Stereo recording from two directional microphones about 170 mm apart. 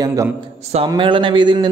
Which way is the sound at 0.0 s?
20° right (ahead or behind).